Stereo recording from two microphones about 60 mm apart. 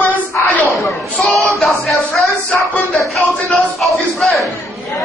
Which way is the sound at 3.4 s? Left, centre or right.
Centre.